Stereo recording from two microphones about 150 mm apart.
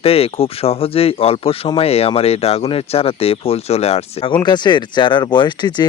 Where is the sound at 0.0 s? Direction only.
40° left (ahead or behind).